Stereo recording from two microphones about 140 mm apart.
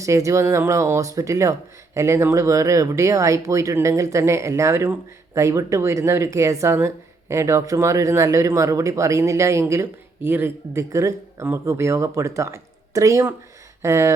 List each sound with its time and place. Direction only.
0.0 s speech: 20° right (ahead or behind)